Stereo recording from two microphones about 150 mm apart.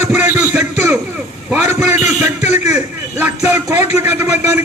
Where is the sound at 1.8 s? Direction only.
15° right (ahead or behind).